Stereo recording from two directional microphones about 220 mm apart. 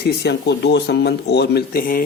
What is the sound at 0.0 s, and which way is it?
Speech, 50° left (ahead or behind).